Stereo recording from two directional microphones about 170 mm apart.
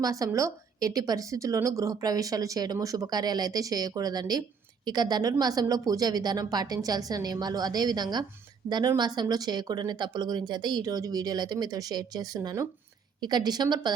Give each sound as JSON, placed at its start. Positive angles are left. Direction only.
{"t": 0.0, "sound": "a woman's voice", "side_deg": -20}